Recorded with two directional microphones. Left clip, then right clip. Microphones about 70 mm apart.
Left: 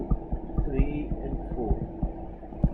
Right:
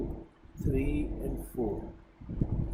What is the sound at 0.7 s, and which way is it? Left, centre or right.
Speech, right.